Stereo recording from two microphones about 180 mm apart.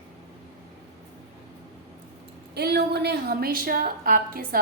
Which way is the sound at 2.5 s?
65° right (ahead or behind).